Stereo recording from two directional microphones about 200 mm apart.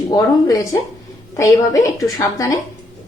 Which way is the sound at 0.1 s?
15° left (ahead or behind).